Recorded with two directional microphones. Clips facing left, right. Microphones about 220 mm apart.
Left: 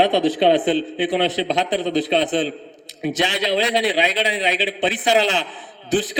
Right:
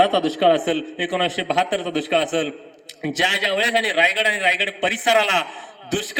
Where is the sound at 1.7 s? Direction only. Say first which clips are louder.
Left 2 dB; 5° right (ahead or behind).